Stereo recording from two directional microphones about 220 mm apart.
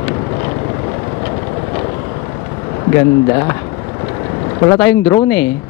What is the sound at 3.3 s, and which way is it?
Speech, 20° left (ahead or behind).